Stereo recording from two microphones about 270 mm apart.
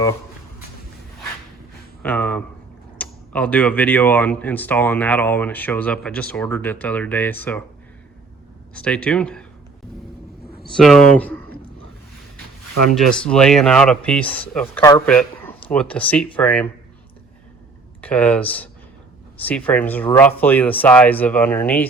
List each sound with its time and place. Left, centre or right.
2.0 s speech: centre
8.7 s speech: centre
10.4 s a sound: left
10.8 s speech: centre
13.0 s speech: centre
18.0 s speech: centre